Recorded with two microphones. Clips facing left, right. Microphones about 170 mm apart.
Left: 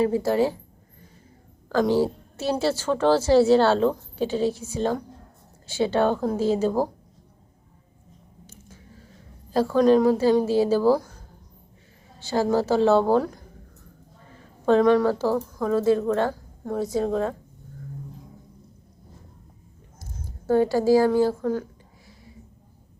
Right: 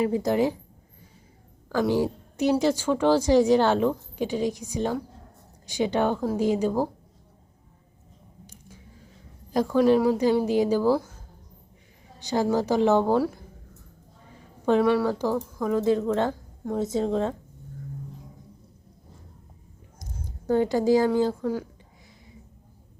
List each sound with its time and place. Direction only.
0.0 s a woman's voice: 20° right (ahead or behind)
1.7 s a woman's voice: 15° right (ahead or behind)
9.5 s a woman's voice: 15° right (ahead or behind)
12.2 s a woman's voice: 15° right (ahead or behind)
14.7 s a woman's voice: 10° right (ahead or behind)
20.5 s a woman's voice: 20° right (ahead or behind)
21.2 s a sound: 15° right (ahead or behind)